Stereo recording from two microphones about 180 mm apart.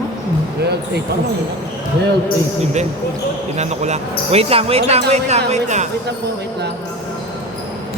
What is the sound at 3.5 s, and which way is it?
Speech, 40° right (ahead or behind).